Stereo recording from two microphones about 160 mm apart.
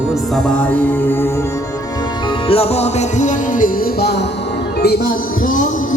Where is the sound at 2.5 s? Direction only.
40° left (ahead or behind).